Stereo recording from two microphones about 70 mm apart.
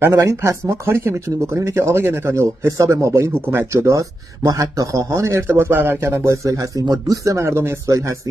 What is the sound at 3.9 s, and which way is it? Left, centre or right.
A man's voice, right.